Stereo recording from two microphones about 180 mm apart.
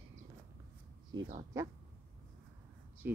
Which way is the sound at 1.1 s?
90° right.